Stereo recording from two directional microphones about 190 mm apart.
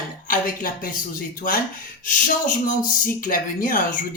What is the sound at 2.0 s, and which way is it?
Speech, 45° left (ahead or behind).